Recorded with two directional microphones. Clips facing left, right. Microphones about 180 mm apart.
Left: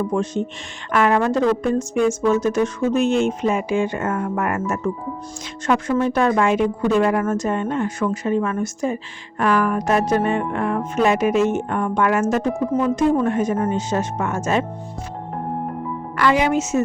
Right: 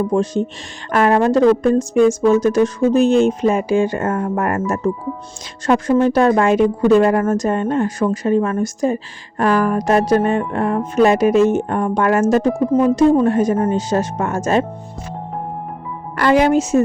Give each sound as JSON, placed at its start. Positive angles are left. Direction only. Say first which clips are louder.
{"t": 0.1, "sound": "a woman's voice", "louder": "right 4 dB", "side_deg": -35}
{"t": 16.1, "sound": "a woman's voice", "louder": "right 5 dB", "side_deg": -40}